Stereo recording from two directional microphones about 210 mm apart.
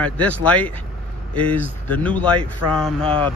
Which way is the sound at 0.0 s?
5° left (ahead or behind).